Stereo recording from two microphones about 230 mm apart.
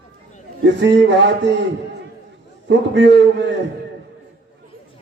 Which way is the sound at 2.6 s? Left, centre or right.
Right.